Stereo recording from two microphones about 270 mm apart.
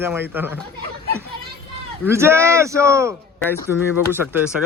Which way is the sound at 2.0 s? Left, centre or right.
Centre.